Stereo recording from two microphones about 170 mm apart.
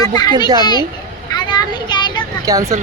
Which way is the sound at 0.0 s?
25° left (ahead or behind).